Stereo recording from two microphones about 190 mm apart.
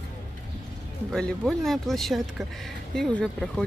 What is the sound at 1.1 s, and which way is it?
Speech, centre (ahead or behind).